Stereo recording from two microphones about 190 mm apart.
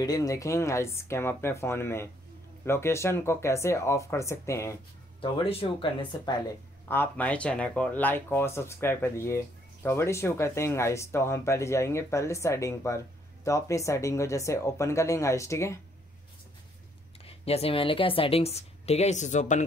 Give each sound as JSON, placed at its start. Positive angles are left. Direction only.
{"t": 0.0, "sound": "speech", "side_deg": 20}
{"t": 5.2, "sound": "speech", "side_deg": 30}
{"t": 6.9, "sound": "speech", "side_deg": 10}
{"t": 17.2, "sound": "speech", "side_deg": 30}